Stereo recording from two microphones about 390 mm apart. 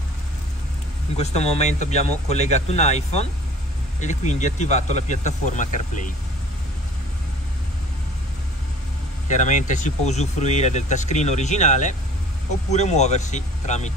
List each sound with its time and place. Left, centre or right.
1.1 s speech: centre
9.3 s speech: centre